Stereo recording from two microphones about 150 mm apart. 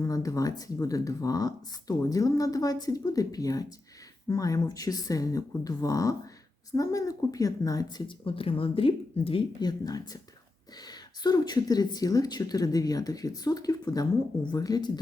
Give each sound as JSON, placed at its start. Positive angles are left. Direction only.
{"t": 0.0, "sound": "speech", "side_deg": 20}